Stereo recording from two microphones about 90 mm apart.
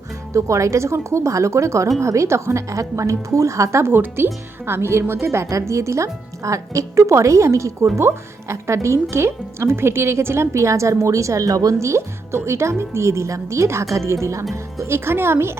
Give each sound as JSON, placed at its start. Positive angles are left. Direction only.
{"t": 0.3, "sound": "speech", "side_deg": -35}